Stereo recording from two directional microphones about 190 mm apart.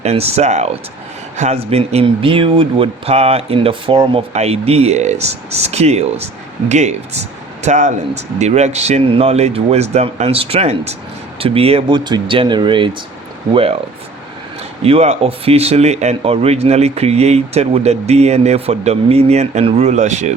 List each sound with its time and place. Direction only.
0.0 s speech: 35° right (ahead or behind)
14.8 s speech: 35° right (ahead or behind)